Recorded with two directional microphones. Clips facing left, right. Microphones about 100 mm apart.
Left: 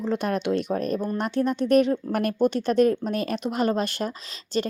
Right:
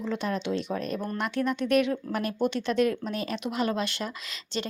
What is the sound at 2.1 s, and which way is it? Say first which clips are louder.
A woman's voice: left 5 dB; 55° left (ahead or behind).